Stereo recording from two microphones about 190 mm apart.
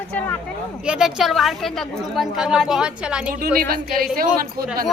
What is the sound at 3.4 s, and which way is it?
Speech, 50° right (ahead or behind).